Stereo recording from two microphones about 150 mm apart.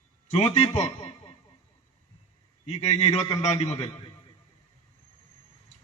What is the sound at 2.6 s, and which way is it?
Speech, 45° left (ahead or behind).